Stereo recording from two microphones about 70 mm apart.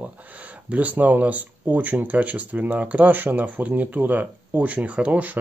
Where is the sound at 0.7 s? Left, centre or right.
Right.